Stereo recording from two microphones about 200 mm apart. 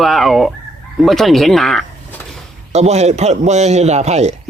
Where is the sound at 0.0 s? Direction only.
Centre (ahead or behind).